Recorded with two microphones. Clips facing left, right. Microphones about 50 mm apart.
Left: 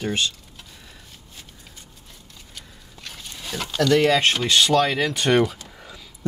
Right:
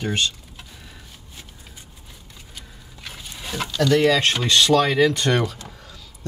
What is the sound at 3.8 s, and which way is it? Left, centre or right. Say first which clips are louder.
Speech: even; centre.